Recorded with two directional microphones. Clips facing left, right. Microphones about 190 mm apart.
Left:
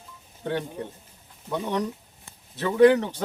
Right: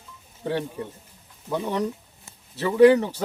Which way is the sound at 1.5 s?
5° right (ahead or behind).